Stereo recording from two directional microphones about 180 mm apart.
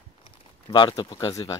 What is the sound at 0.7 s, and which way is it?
Speech, 25° left (ahead or behind).